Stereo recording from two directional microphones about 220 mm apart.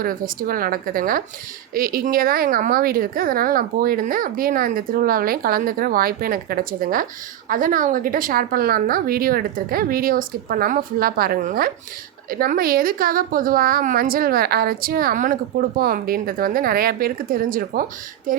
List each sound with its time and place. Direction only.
0.0 s a woman's voice: 40° right (ahead or behind)